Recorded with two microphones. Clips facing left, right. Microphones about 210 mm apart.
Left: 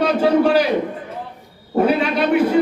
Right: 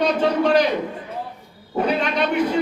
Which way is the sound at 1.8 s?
5° left (ahead or behind).